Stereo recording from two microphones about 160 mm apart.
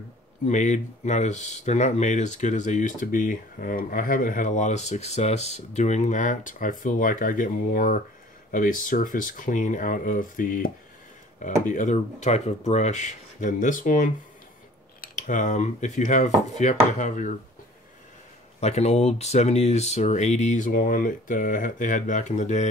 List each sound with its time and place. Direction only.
0.5 s speech: 50° left (ahead or behind)
18.6 s speech: 40° left (ahead or behind)